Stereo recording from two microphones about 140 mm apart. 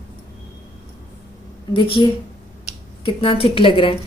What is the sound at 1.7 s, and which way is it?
Speech, 35° left (ahead or behind).